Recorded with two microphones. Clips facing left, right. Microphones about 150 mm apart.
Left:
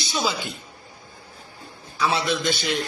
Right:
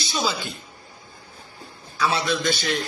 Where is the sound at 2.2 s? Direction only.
15° left (ahead or behind).